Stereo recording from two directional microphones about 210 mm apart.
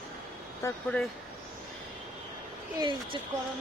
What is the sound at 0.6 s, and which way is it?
Speech, 5° left (ahead or behind).